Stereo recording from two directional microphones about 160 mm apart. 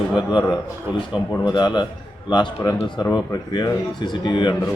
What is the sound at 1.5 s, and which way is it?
Speech, 30° left (ahead or behind).